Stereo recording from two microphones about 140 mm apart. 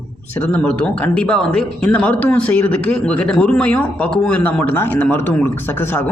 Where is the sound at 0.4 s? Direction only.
10° left (ahead or behind).